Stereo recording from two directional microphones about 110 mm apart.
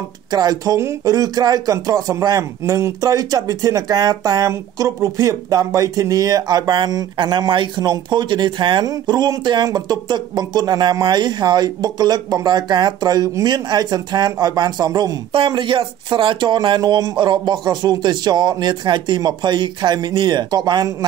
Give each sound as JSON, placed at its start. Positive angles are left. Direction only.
{"t": 0.3, "sound": "speech", "side_deg": -35}
{"t": 15.3, "sound": "speech", "side_deg": -50}